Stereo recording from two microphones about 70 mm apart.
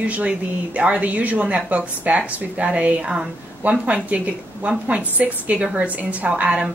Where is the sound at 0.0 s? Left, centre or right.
Centre.